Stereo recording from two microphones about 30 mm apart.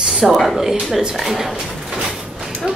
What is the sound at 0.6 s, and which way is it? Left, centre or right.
A woman's voice, centre.